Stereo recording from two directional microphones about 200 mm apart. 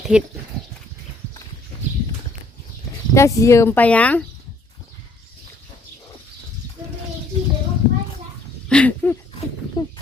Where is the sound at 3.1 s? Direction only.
15° left (ahead or behind).